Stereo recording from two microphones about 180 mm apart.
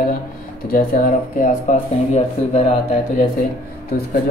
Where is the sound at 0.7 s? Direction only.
50° left (ahead or behind).